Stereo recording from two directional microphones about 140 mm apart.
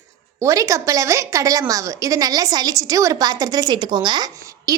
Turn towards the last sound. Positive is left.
turn(degrees=-25)  # may be behind; listen again after turning